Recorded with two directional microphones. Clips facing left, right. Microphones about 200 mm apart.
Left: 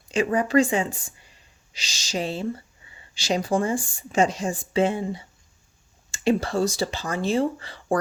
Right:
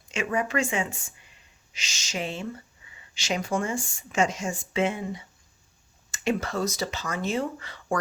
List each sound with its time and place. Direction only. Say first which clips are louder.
0.1 s speech: left 7 dB; 35° left (ahead or behind)